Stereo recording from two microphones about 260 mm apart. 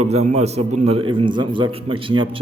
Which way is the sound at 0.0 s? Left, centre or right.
Right.